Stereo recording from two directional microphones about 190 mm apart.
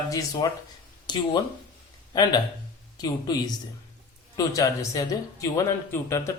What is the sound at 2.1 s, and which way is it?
Speech, 20° left (ahead or behind).